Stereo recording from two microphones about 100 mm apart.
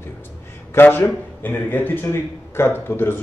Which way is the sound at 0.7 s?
20° left (ahead or behind).